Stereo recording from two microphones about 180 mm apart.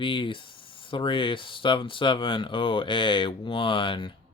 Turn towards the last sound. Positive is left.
turn(degrees=30)  # may be behind; listen again after turning